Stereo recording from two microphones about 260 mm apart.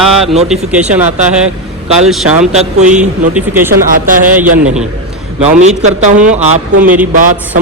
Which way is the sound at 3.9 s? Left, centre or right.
Right.